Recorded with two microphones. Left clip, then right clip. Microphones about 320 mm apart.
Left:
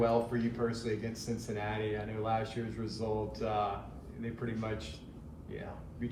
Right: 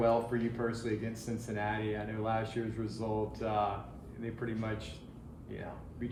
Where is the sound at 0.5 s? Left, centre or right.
Right.